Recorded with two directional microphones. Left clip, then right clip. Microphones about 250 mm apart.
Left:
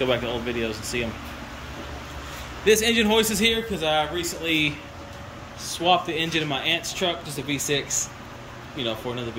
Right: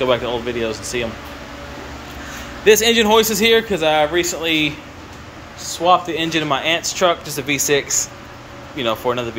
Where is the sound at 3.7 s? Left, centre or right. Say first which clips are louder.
Right 8 dB; centre.